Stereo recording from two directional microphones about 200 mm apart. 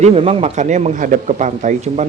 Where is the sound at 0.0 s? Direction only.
30° right (ahead or behind).